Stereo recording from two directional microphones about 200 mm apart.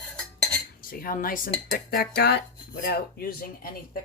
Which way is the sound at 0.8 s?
45° left (ahead or behind).